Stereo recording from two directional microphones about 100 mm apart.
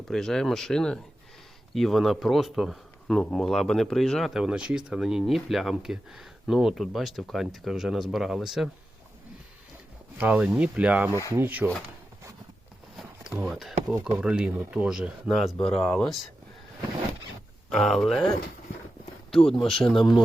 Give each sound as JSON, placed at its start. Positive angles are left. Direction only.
{"t": 0.1, "sound": "speech", "side_deg": 5}
{"t": 4.4, "sound": "speech", "side_deg": -10}
{"t": 10.2, "sound": "speech", "side_deg": -15}
{"t": 11.1, "sound": "speech", "side_deg": 30}
{"t": 11.3, "sound": "speech", "side_deg": -20}
{"t": 13.0, "sound": "a sound", "side_deg": -5}
{"t": 13.5, "sound": "speech", "side_deg": 0}
{"t": 15.7, "sound": "speech", "side_deg": 10}
{"t": 17.7, "sound": "speech", "side_deg": 0}
{"t": 19.5, "sound": "speech", "side_deg": 5}